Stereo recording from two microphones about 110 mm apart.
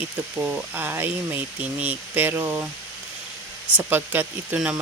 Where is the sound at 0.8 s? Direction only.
20° right (ahead or behind).